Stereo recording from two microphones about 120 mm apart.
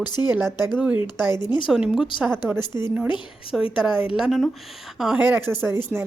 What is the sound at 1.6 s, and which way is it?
Speech, 5° right (ahead or behind).